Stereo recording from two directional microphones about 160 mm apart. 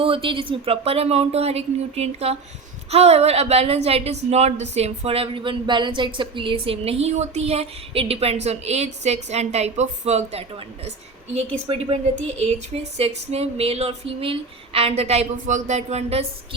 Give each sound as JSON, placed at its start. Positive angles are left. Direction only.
{"t": 0.0, "sound": "speech", "side_deg": -35}
{"t": 11.7, "sound": "speech", "side_deg": -35}